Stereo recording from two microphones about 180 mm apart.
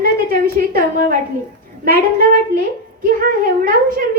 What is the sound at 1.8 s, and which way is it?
A child's voice, 50° right (ahead or behind).